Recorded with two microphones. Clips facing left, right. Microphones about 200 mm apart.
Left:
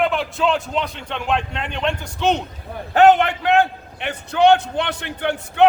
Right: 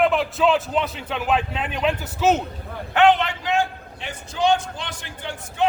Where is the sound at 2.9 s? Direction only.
45° left (ahead or behind).